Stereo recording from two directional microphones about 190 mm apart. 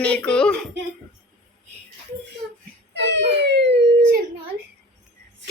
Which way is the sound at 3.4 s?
65° right (ahead or behind).